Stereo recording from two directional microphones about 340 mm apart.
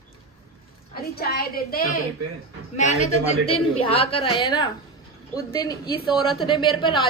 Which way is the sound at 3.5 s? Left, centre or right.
Centre.